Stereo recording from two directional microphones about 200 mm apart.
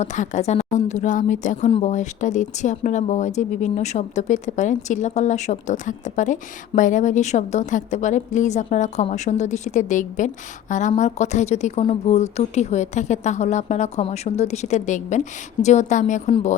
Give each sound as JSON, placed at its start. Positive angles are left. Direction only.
{"t": 0.0, "sound": "speech", "side_deg": 35}